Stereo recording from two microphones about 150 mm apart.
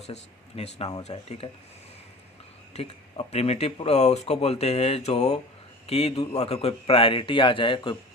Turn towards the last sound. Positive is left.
turn(degrees=35)  # may be behind; listen again after turning